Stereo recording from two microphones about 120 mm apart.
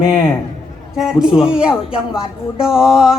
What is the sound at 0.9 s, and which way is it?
Speech, 5° right (ahead or behind).